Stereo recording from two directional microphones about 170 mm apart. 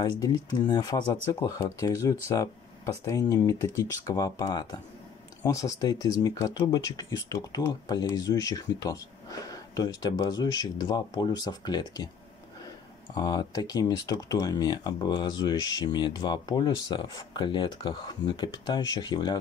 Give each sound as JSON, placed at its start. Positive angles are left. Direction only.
{"t": 0.0, "sound": "speech", "side_deg": 25}
{"t": 13.1, "sound": "speech", "side_deg": 25}